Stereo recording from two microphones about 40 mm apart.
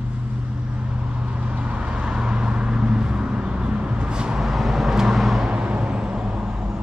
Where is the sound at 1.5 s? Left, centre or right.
Right.